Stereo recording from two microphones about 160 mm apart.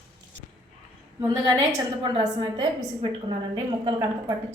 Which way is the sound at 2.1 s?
30° right (ahead or behind).